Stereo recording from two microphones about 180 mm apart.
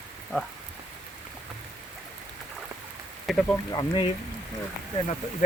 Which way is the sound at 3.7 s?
25° left (ahead or behind).